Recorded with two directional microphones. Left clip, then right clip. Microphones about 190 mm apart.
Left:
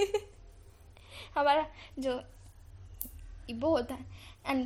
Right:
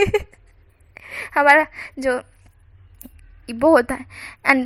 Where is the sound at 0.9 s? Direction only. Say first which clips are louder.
Right 13 dB; 60° right (ahead or behind).